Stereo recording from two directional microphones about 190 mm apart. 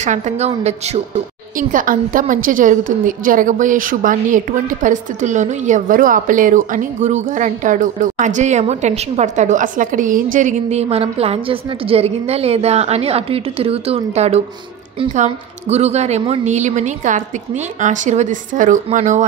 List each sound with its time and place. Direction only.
0.0 s a woman's voice: 40° right (ahead or behind)